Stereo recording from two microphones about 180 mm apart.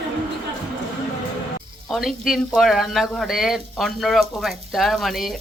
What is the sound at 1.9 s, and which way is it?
Speech, centre (ahead or behind).